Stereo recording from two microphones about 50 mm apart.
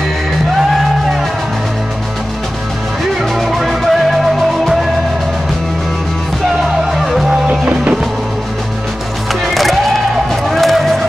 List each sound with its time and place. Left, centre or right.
3.2 s music: centre
6.6 s music: centre
7.2 s music: right
9.3 s music: centre
10.5 s run: centre